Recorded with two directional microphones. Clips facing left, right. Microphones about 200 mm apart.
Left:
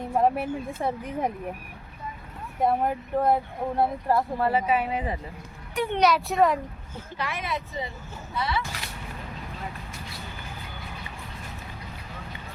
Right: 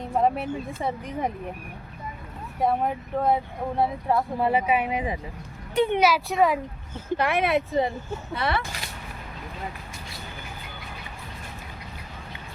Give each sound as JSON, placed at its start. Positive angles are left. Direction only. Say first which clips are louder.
{"t": 0.0, "sound": "a sound", "louder": "even", "side_deg": 5}
{"t": 0.8, "sound": "speech", "louder": "left 1 dB", "side_deg": 5}
{"t": 2.6, "sound": "speech", "louder": "even", "side_deg": 0}
{"t": 4.4, "sound": "speech", "louder": "right 1 dB", "side_deg": -15}
{"t": 6.0, "sound": "speech", "louder": "left 5 dB", "side_deg": -5}
{"t": 7.2, "sound": "speech", "louder": "right 8 dB", "side_deg": -60}